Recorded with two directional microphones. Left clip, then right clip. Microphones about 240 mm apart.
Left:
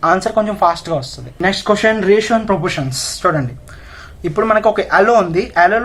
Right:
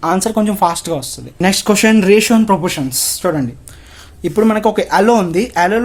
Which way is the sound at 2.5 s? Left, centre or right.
Right.